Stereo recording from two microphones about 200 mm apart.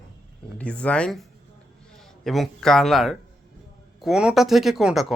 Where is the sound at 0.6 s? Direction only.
5° left (ahead or behind).